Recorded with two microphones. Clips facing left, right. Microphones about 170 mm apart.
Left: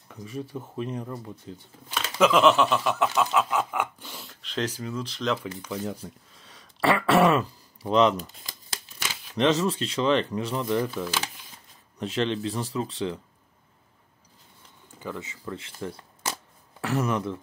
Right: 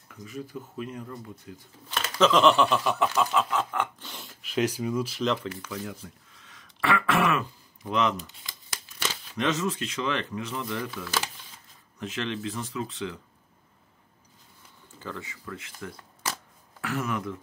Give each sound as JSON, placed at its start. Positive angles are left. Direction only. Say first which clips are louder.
{"t": 0.1, "sound": "speech", "louder": "left 3 dB", "side_deg": 30}
{"t": 2.1, "sound": "a sound", "louder": "left 1 dB", "side_deg": 10}
{"t": 5.5, "sound": "speech", "louder": "left 4 dB", "side_deg": 25}
{"t": 6.4, "sound": "throat clearing", "louder": "left 5 dB", "side_deg": 30}
{"t": 9.4, "sound": "speech", "louder": "left 5 dB", "side_deg": 30}
{"t": 15.0, "sound": "speech", "louder": "left 3 dB", "side_deg": 15}